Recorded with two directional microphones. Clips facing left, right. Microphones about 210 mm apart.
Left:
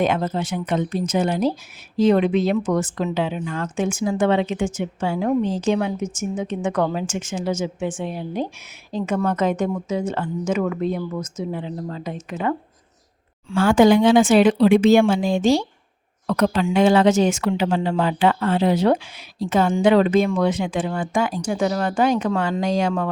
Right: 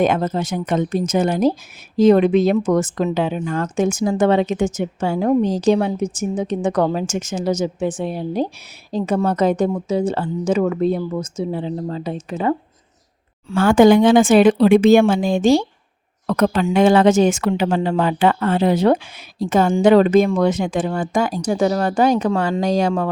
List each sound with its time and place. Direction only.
0.0 s a woman's voice: 45° right (ahead or behind)
13.5 s a woman's voice: 50° right (ahead or behind)